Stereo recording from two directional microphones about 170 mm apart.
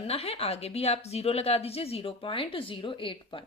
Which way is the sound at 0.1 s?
35° left (ahead or behind).